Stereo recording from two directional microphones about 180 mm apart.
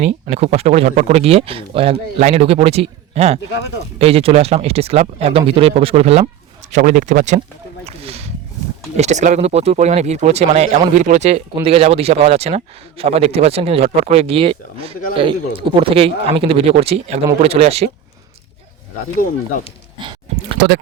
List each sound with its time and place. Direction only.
0.0 s speech: 35° right (ahead or behind)
7.9 s a sound: 35° right (ahead or behind)
9.0 s speech: 40° right (ahead or behind)
20.3 s speech: 40° right (ahead or behind)